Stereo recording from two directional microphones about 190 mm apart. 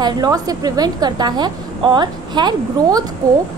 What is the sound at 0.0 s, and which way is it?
A woman's voice, 20° right (ahead or behind).